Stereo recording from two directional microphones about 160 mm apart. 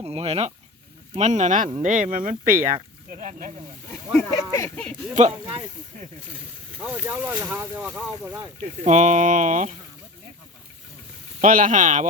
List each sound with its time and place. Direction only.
0.0 s speech: 40° right (ahead or behind); by 3.5 s 55° right (ahead or behind)
4.3 s speech: 20° left (ahead or behind)
5.1 s speech: 45° right (ahead or behind)
6.7 s speech: 10° right (ahead or behind)
8.8 s speech: 50° right (ahead or behind)
11.3 s speech: 55° right (ahead or behind)